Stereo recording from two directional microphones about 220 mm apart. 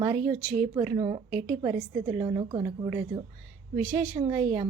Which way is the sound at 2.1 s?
20° right (ahead or behind).